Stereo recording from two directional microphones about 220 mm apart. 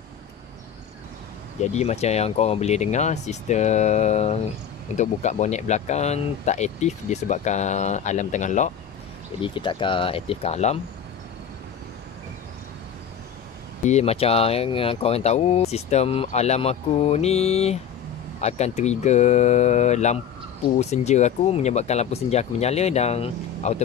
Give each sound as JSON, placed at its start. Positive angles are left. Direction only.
{"t": 1.6, "sound": "speech", "side_deg": 30}
{"t": 9.4, "sound": "speech", "side_deg": 20}
{"t": 13.8, "sound": "speech", "side_deg": 30}